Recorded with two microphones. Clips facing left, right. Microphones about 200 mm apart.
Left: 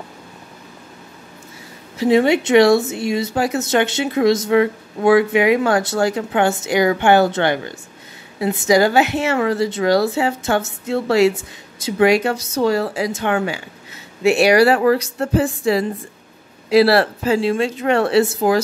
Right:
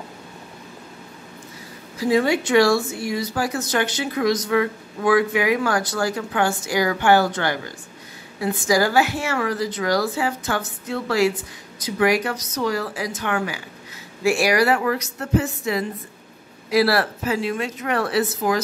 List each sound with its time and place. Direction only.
2.0 s speech: 25° left (ahead or behind)